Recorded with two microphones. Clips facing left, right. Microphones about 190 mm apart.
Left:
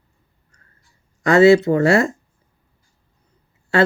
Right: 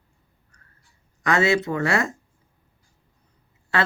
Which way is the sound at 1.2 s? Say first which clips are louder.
Left 10 dB; 35° left (ahead or behind).